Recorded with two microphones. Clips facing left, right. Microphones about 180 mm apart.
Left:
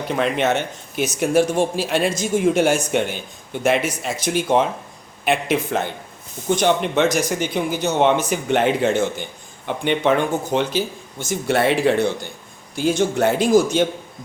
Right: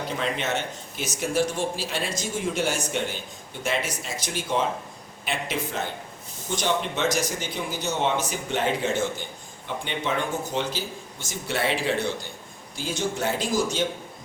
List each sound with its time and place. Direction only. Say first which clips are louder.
0.1 s speech: left 10 dB; 60° left (ahead or behind)